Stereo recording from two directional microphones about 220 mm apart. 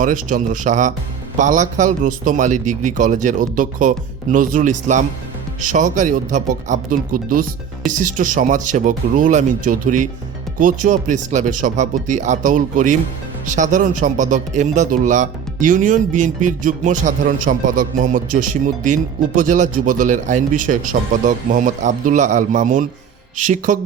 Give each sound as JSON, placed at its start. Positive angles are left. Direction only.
{"t": 0.0, "sound": "speech", "side_deg": -35}